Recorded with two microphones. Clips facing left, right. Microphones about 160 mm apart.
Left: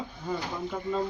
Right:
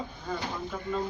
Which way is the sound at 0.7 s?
20° left (ahead or behind).